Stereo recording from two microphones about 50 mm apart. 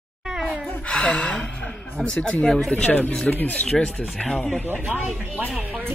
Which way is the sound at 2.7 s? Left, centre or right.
Left.